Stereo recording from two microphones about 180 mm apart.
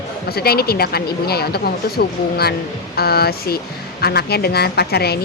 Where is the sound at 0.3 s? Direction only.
60° left (ahead or behind).